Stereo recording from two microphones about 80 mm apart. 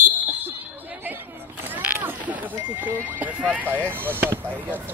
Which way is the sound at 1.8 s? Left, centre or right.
Right.